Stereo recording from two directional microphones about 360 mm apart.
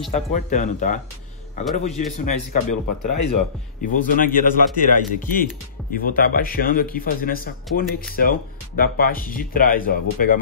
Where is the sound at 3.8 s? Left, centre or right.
Left.